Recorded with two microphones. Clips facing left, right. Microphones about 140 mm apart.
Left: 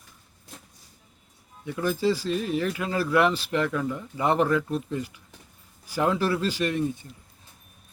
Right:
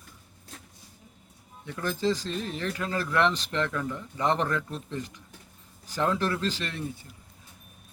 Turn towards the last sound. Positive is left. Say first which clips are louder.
# left 9 dB
turn(degrees=15)  # may be behind; listen again after turning